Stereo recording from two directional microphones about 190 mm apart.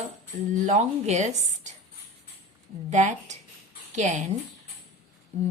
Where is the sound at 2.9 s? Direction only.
40° right (ahead or behind).